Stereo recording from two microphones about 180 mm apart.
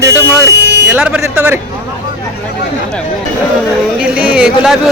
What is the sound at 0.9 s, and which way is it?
Speech, 5° right (ahead or behind).